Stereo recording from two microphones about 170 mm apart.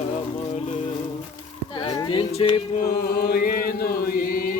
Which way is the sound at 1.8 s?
25° left (ahead or behind).